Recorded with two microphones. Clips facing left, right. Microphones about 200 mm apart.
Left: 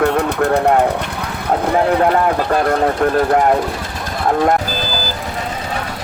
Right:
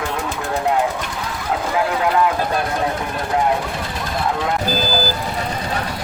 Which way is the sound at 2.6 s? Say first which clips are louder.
Left 7 dB; 60° left (ahead or behind).